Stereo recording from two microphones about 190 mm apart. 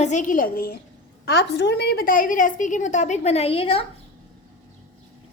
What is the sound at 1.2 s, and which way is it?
A woman's voice, 65° left (ahead or behind).